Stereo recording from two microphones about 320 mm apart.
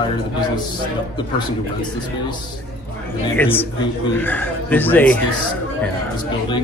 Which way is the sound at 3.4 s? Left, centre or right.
Centre.